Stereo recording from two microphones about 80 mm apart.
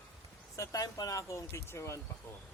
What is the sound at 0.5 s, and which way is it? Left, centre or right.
Speech, left.